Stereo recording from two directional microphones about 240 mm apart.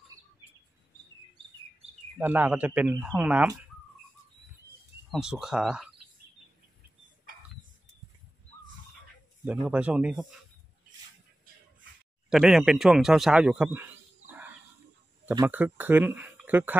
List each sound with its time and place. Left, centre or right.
2.1 s speech: centre
5.1 s speech: centre
7.3 s a sound: right
9.4 s speech: centre
12.3 s a man's voice: centre